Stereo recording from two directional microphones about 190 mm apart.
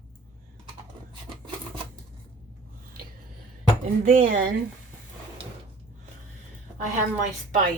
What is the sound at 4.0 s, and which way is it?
Speech, 45° right (ahead or behind).